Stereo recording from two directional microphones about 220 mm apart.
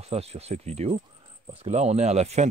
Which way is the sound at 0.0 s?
30° right (ahead or behind).